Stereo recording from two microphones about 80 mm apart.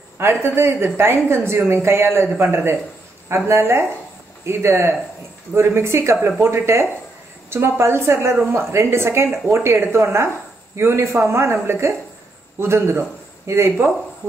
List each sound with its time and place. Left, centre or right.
0.2 s a woman's voice: right